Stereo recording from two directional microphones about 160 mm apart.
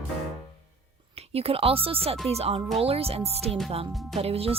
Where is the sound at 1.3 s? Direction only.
35° right (ahead or behind).